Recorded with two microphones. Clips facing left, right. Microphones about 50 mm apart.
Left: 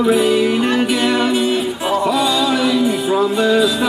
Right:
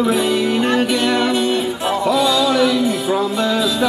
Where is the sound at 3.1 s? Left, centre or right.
Centre.